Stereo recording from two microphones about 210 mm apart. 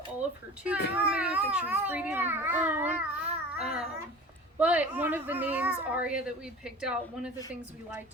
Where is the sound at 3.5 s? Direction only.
5° right (ahead or behind).